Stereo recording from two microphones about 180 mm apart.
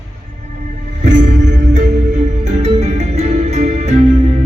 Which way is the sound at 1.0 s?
40° right (ahead or behind).